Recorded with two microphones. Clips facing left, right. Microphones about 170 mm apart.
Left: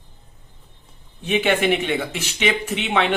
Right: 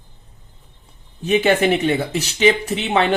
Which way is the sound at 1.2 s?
40° right (ahead or behind).